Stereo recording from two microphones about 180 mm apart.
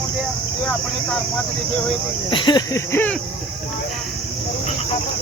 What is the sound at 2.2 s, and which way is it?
Speech, 25° left (ahead or behind).